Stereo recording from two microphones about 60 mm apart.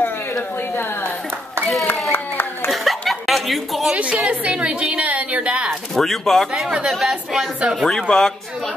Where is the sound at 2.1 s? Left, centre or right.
Left.